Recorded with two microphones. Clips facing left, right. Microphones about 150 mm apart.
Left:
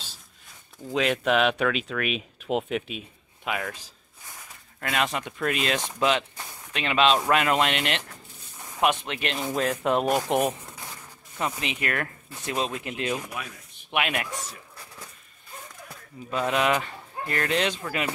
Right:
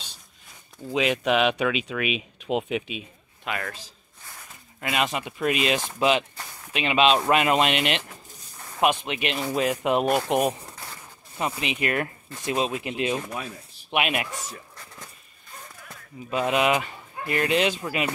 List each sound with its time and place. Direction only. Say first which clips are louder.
0.8 s speech: right 1 dB; 5° right (ahead or behind)
4.7 s speech: right 1 dB; 10° right (ahead or behind)
11.3 s speech: right 2 dB; 20° right (ahead or behind)
13.3 s speech: right 3 dB; 35° right (ahead or behind)
13.8 s speech: right 2 dB; 20° right (ahead or behind)
16.3 s speech: right 2 dB; 15° right (ahead or behind)